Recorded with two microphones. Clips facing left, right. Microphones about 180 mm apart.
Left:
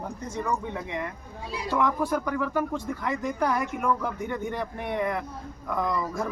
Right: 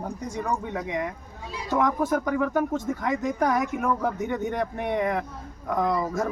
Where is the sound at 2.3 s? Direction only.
20° right (ahead or behind).